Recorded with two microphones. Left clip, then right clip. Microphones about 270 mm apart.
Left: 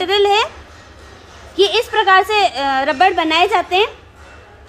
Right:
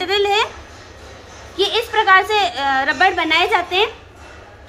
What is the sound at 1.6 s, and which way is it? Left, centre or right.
A woman's voice, left.